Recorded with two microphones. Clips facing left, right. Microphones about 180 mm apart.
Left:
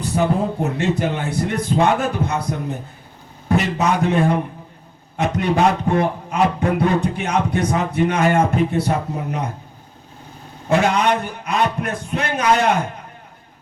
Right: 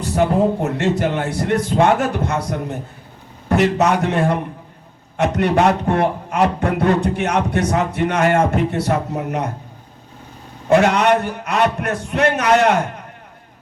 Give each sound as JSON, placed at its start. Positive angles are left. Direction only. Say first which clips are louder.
{"t": 0.6, "sound": "a man's voice", "louder": "right 1 dB", "side_deg": -60}
{"t": 10.8, "sound": "a man's voice", "louder": "right 3 dB", "side_deg": -65}